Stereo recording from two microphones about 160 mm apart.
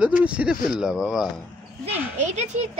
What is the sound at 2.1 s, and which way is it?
Speech, 45° right (ahead or behind).